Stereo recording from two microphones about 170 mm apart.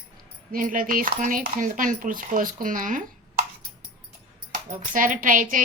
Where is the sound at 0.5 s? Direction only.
55° right (ahead or behind).